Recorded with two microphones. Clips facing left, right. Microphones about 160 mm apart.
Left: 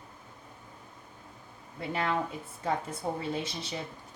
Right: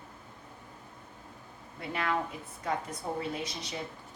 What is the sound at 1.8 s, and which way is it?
Speech, 30° left (ahead or behind).